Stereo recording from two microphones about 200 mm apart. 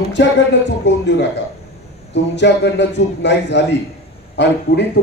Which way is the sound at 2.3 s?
60° left (ahead or behind).